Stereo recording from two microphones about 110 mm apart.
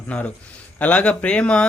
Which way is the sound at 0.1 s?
15° left (ahead or behind).